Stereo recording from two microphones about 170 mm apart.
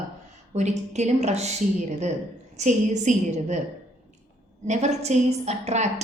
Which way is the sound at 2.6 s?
45° right (ahead or behind).